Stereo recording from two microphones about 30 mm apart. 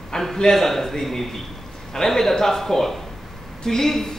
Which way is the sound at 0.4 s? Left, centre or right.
Centre.